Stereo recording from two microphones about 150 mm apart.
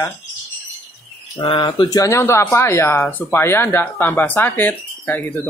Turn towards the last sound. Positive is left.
turn(degrees=10)  # may be behind; listen again after turning